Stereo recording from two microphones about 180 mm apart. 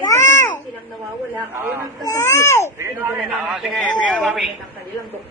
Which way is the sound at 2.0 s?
20° left (ahead or behind).